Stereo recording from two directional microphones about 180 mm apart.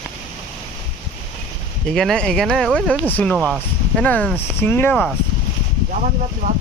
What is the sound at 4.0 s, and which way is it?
Speech, 5° left (ahead or behind).